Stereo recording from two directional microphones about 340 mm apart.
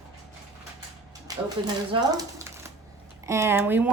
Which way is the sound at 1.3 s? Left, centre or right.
Centre.